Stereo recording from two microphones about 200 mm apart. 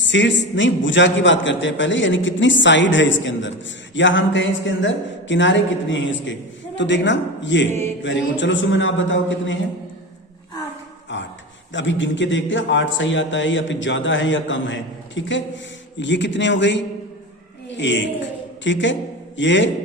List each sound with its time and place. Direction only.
0.0 s a man's voice: 65° left (ahead or behind)
11.1 s a sound: 65° left (ahead or behind)
11.7 s a man's voice: 65° left (ahead or behind)